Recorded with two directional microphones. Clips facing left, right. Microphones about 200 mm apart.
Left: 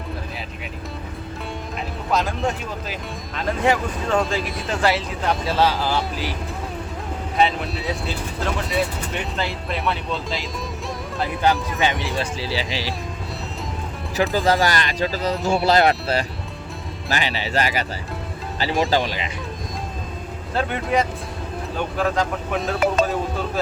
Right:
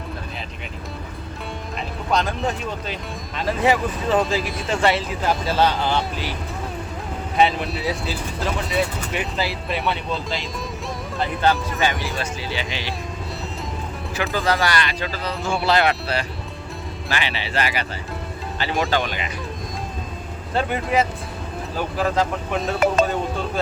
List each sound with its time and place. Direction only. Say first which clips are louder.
2.1 s speech: even; centre (ahead or behind)
7.3 s speech: right 1 dB; centre (ahead or behind)
11.4 s speech: even; 10° left (ahead or behind)
12.2 s speech: left 2 dB; 30° left (ahead or behind)
14.2 s speech: left 3 dB; 40° left (ahead or behind)
18.9 s speech: left 2 dB; 30° left (ahead or behind)
20.5 s speech: even; centre (ahead or behind)